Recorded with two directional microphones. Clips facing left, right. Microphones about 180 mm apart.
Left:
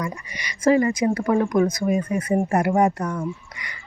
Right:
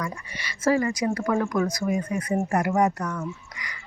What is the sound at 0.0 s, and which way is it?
Speech, 15° left (ahead or behind).